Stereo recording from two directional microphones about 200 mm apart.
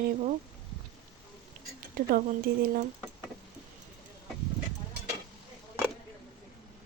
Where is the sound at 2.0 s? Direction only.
45° right (ahead or behind).